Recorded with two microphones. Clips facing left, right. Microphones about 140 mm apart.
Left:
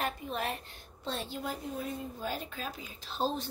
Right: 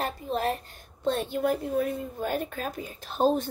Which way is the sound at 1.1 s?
55° right (ahead or behind).